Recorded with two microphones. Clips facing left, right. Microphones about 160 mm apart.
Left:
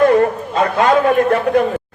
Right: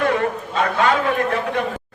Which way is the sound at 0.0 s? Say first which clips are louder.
Left 8 dB; 40° left (ahead or behind).